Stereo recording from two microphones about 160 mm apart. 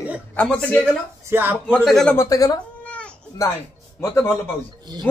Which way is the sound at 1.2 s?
15° right (ahead or behind).